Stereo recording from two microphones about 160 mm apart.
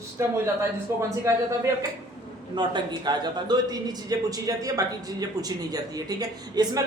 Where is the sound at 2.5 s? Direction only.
30° right (ahead or behind).